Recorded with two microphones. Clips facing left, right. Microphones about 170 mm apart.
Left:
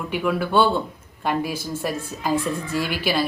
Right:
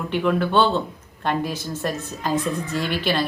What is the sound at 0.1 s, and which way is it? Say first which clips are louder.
Speech: right 1 dB; 5° left (ahead or behind).